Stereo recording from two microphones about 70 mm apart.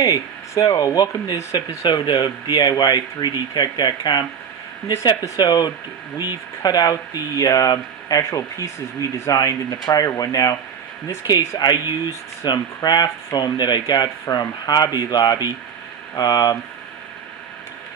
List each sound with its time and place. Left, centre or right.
0.0 s speech: left
1.9 s speech: left
5.4 s speech: left
8.2 s speech: left
9.3 s speech: left
11.2 s speech: left
12.4 s speech: left
14.3 s speech: left